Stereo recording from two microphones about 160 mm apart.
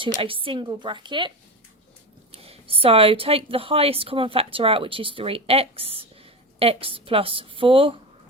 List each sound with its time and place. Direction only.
0.2 s speech: 35° right (ahead or behind)
2.3 s speech: 35° right (ahead or behind)